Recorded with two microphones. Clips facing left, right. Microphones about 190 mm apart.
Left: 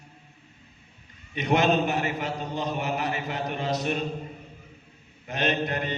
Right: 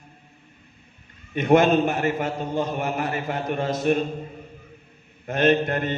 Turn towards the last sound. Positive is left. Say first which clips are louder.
# right 7 dB
turn(degrees=-50)  # may be behind; listen again after turning